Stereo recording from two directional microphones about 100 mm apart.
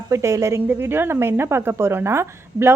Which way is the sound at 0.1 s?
30° right (ahead or behind).